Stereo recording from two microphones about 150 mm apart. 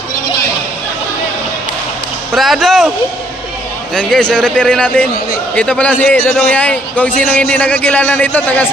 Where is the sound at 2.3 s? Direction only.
Centre (ahead or behind).